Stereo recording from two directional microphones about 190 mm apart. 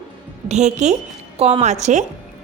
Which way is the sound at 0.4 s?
35° right (ahead or behind).